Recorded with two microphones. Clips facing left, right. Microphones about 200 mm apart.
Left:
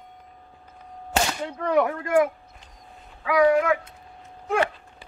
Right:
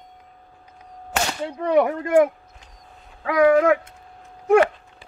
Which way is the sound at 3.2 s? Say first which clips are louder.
Right 3 dB; 45° right (ahead or behind).